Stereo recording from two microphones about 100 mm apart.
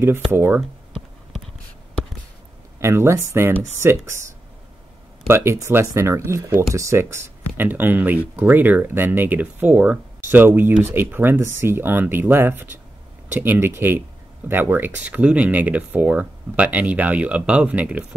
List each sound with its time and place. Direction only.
0.0 s speech: 20° right (ahead or behind)
2.8 s speech: 25° right (ahead or behind)